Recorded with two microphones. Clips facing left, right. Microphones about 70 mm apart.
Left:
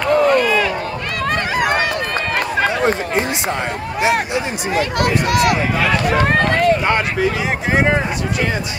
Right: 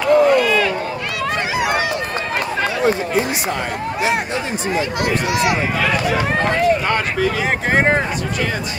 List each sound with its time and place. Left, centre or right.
0.0 s a sound: left
1.3 s run: left
4.7 s speech: left
7.7 s speech: right